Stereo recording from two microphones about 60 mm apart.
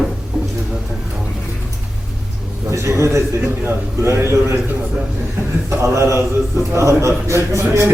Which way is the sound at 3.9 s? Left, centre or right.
Right.